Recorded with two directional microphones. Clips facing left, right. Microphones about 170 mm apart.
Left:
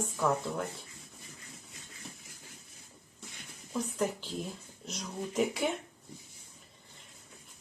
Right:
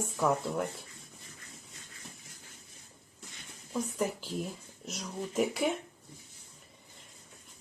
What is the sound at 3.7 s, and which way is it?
Speech, 10° right (ahead or behind).